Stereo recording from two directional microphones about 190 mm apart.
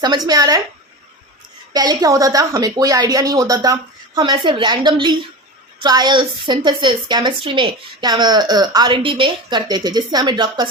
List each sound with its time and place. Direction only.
0.0 s a woman's voice: 20° right (ahead or behind)
1.7 s a woman's voice: 20° right (ahead or behind)